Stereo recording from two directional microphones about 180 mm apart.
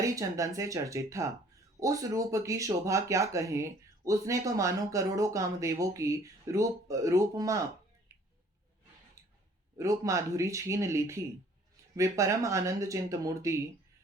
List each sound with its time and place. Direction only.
0.0 s speech: 15° right (ahead or behind)
9.7 s speech: 20° right (ahead or behind)